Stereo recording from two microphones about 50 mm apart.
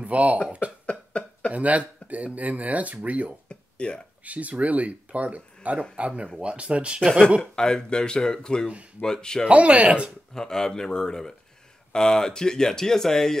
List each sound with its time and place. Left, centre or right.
0.0 s speech: right
0.5 s cough: right
0.8 s cough: left
1.5 s speech: right
3.4 s a sound: left
4.2 s speech: right
7.5 s speech: centre
9.5 s speech: right
10.3 s speech: centre